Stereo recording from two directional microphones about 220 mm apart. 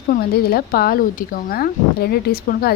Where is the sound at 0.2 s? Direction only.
45° left (ahead or behind).